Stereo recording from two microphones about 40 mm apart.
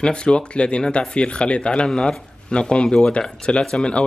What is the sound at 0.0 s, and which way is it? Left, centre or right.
Speech, left.